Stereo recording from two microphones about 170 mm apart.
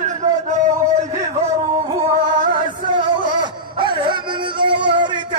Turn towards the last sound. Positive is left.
turn(degrees=-30)  # may be behind; listen again after turning